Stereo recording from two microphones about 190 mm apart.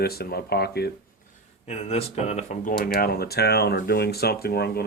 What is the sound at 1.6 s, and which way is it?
Speech, 35° left (ahead or behind).